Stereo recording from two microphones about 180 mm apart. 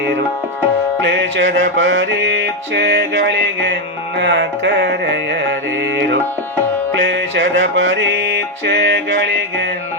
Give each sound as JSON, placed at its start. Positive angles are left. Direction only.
{"t": 1.0, "sound": "music", "side_deg": -90}
{"t": 6.9, "sound": "music", "side_deg": -85}